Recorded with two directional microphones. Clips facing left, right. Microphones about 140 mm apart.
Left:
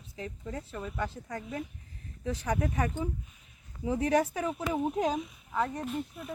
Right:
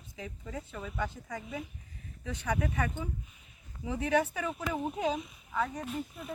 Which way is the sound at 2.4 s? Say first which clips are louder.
Left 1 dB; 35° left (ahead or behind).